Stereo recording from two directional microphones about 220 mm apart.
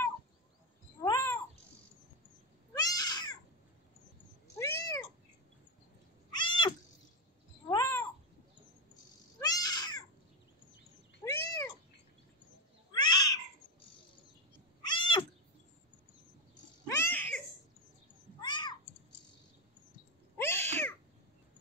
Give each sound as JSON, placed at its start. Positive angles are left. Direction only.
{"t": 1.0, "sound": "cat", "side_deg": 15}
{"t": 2.7, "sound": "cat", "side_deg": 15}
{"t": 4.6, "sound": "cat", "side_deg": 15}
{"t": 6.3, "sound": "cat", "side_deg": 20}
{"t": 7.7, "sound": "cat", "side_deg": 10}
{"t": 9.4, "sound": "cat", "side_deg": 15}
{"t": 11.2, "sound": "cat", "side_deg": 10}
{"t": 12.9, "sound": "cat", "side_deg": 20}
{"t": 16.8, "sound": "cat", "side_deg": 10}
{"t": 18.4, "sound": "cat", "side_deg": 20}
{"t": 20.3, "sound": "cat", "side_deg": 10}